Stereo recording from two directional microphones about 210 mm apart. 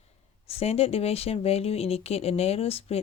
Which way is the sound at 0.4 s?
30° left (ahead or behind).